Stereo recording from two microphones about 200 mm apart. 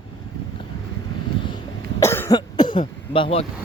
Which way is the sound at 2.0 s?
15° left (ahead or behind).